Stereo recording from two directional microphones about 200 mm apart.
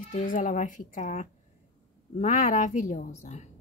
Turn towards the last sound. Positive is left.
turn(degrees=35)  # may be behind; listen again after turning